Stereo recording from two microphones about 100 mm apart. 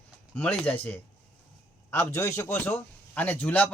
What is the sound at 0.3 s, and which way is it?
A man's voice, 15° left (ahead or behind).